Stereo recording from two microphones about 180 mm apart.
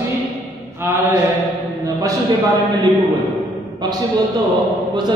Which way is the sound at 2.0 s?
20° right (ahead or behind).